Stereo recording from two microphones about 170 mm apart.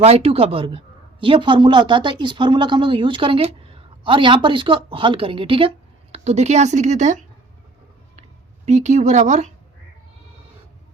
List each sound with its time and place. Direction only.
0.0 s speech: 35° right (ahead or behind)
8.6 s speech: 45° right (ahead or behind)